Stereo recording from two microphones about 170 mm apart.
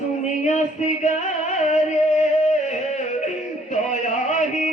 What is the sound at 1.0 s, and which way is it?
Music, 45° left (ahead or behind).